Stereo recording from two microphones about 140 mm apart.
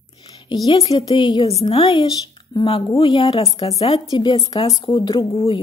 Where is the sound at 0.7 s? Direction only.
45° left (ahead or behind).